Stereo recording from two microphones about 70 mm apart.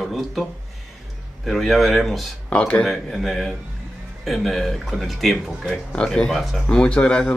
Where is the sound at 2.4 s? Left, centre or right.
Centre.